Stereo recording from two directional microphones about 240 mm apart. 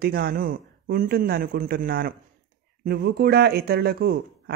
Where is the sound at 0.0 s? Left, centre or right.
Right.